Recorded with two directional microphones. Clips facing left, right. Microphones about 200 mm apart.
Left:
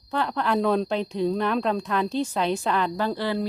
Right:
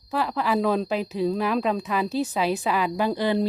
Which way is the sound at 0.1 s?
5° right (ahead or behind).